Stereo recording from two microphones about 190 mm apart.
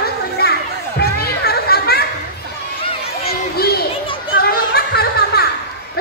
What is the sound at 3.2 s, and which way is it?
Children playing, 55° left (ahead or behind).